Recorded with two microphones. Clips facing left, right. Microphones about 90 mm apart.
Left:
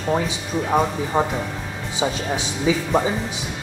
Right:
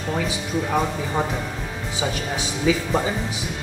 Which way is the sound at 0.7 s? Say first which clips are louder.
Left 5 dB; 20° left (ahead or behind).